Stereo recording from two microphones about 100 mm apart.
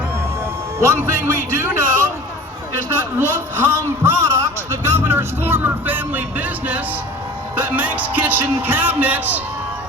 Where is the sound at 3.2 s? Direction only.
20° right (ahead or behind).